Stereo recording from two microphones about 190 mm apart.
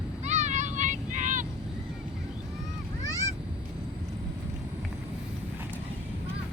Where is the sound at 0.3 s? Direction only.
40° right (ahead or behind).